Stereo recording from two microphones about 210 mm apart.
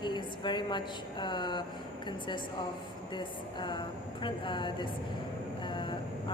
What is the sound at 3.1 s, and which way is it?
A woman's voice, 20° left (ahead or behind).